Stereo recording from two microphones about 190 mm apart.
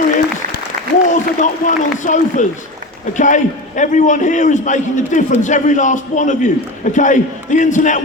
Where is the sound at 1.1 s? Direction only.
40° left (ahead or behind).